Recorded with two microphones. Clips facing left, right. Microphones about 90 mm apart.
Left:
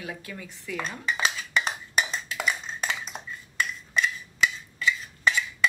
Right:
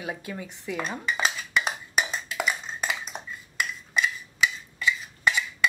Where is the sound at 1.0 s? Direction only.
Centre (ahead or behind).